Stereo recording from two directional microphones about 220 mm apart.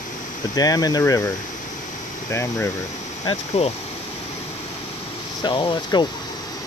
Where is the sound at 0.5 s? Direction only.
15° left (ahead or behind).